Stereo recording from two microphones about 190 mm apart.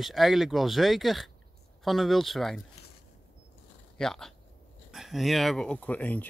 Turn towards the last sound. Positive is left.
turn(degrees=10)  # may be behind; listen again after turning